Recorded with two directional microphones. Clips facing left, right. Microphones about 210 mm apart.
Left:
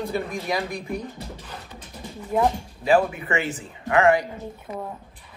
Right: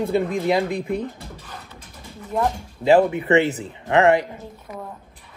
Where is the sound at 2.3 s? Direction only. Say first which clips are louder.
Left 1 dB; 5° left (ahead or behind).